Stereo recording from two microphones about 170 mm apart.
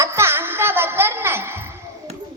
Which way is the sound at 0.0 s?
15° right (ahead or behind).